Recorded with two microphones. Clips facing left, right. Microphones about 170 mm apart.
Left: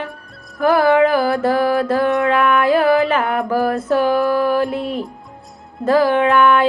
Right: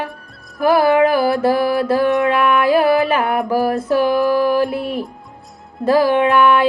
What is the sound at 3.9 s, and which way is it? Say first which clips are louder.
Music: right 1 dB; 15° right (ahead or behind).